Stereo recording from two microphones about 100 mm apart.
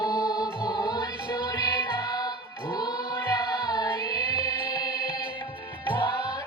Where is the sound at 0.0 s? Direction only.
40° left (ahead or behind).